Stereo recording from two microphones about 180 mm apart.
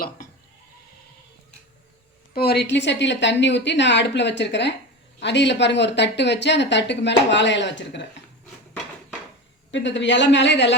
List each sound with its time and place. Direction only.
2.3 s speech: 60° left (ahead or behind); by 8.0 s 80° left
9.7 s a woman's voice: 85° left